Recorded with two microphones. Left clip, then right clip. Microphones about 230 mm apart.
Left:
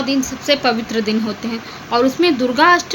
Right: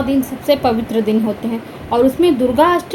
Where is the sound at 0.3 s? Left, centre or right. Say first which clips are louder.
Right 1 dB; centre.